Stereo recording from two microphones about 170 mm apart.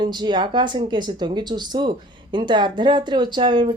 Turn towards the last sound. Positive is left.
turn(degrees=-25)  # may be behind; listen again after turning